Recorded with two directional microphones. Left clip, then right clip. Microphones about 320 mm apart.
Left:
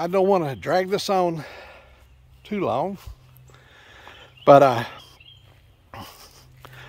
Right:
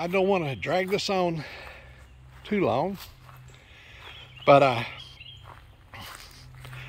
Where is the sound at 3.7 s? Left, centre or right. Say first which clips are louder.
Even; left.